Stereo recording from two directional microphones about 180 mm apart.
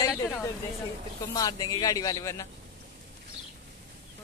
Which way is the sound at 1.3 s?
20° left (ahead or behind).